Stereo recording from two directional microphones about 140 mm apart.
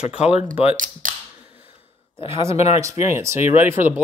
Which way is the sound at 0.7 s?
70° right (ahead or behind).